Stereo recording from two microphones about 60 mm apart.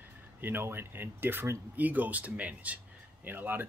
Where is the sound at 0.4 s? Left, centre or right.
Right.